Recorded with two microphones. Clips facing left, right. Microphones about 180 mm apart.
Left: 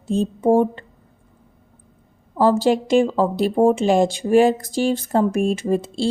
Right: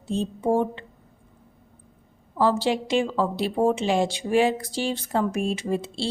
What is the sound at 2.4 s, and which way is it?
A woman's voice, 45° left (ahead or behind).